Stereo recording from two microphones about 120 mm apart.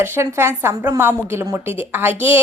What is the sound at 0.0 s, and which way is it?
A woman's voice, 20° right (ahead or behind).